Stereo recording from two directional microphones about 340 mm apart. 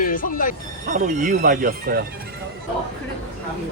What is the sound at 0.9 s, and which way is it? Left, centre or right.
Speech, right.